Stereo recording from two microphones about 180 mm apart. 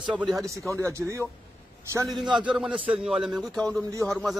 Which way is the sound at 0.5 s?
15° right (ahead or behind).